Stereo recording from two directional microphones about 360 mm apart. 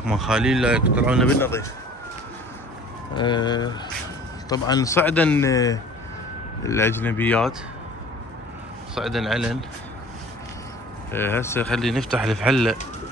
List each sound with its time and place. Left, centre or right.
0.0 s speech: centre
3.2 s a man's voice: centre
8.9 s speech: centre
11.1 s speech: centre